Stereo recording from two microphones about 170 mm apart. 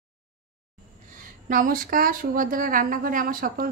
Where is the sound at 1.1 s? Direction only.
55° right (ahead or behind).